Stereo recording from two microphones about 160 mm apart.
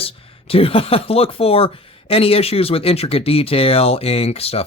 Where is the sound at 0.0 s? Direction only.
35° left (ahead or behind).